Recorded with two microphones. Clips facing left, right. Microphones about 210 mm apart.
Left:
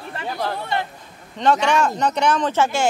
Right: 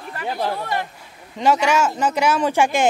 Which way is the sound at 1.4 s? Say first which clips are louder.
Even; 10° right (ahead or behind).